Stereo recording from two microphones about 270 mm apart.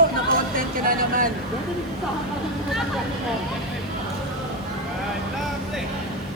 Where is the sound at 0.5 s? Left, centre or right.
Right.